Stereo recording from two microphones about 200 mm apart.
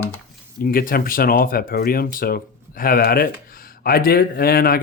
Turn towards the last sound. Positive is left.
turn(degrees=50)  # may be behind; listen again after turning